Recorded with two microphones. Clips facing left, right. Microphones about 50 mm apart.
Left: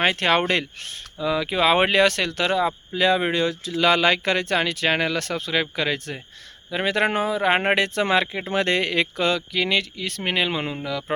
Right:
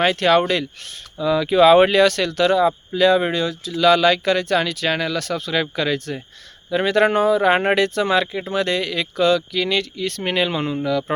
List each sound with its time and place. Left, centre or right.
0.0 s speech: left
1.2 s speech: centre
3.4 s speech: left
5.5 s speech: centre
7.9 s speech: left
9.1 s speech: left